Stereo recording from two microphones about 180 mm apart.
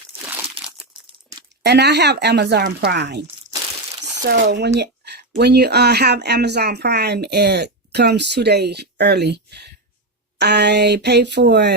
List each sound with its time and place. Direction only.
0.6 s crumpling: 30° right (ahead or behind)
1.6 s speech: 70° right (ahead or behind)
4.8 s a sound: 70° right (ahead or behind)
5.4 s speech: 65° right (ahead or behind)